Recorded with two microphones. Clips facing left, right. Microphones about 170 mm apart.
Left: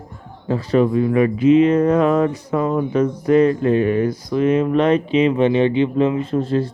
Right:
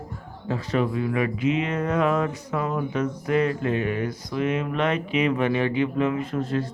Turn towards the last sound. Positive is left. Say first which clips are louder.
# left 7 dB
turn(degrees=30)  # may be behind; listen again after turning